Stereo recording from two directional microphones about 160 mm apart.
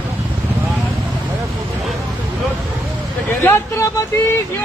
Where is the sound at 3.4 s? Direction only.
15° left (ahead or behind).